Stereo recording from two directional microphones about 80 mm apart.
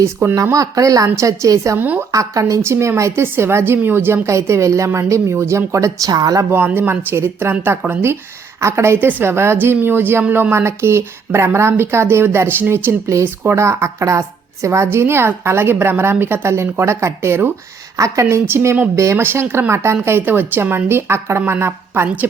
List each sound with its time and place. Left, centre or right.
0.0 s a woman's voice: right
0.5 s speech: right
1.8 s speech: right
2.1 s a woman's voice: right
6.5 s speech: right
10.5 s a woman's voice: right